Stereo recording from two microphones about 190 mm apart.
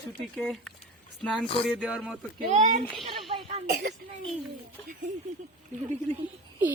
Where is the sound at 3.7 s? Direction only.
55° right (ahead or behind).